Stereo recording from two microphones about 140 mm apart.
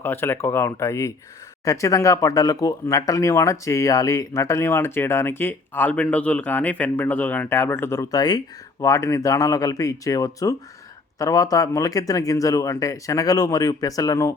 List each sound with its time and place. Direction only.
0.0 s speech: 15° left (ahead or behind)